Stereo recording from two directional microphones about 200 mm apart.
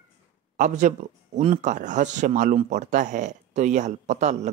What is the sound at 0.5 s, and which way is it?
Speech, 40° right (ahead or behind).